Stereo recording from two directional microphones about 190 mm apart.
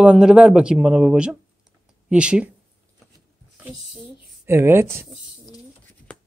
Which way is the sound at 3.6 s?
Centre (ahead or behind).